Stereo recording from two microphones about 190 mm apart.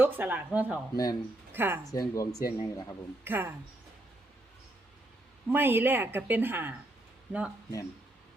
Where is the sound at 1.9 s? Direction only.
20° left (ahead or behind).